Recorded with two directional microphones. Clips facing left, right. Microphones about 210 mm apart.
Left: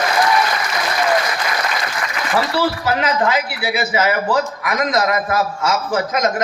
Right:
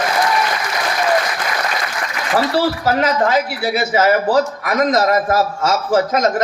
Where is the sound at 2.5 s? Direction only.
40° right (ahead or behind).